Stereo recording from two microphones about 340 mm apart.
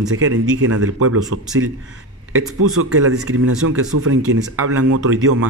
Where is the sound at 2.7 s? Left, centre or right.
Right.